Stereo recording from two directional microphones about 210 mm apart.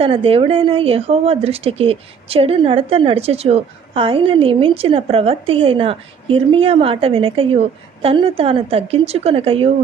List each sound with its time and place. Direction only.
0.0 s speech: 25° right (ahead or behind)